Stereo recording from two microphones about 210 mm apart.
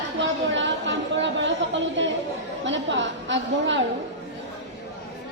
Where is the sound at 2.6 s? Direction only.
60° right (ahead or behind).